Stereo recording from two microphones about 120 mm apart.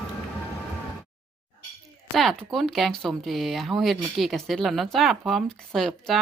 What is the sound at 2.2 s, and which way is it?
Speech, centre (ahead or behind).